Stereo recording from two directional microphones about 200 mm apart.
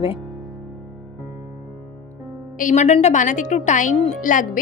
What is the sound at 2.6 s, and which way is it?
A woman's voice, 40° left (ahead or behind).